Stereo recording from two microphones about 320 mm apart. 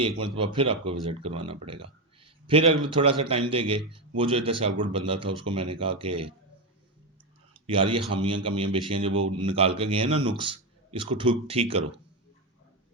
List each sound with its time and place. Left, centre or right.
0.3 s speech: centre
2.2 s a sound: centre
2.8 s speech: centre
7.5 s speech: centre